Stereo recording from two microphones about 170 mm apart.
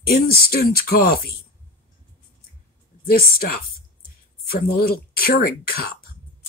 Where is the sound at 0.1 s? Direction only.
65° left (ahead or behind).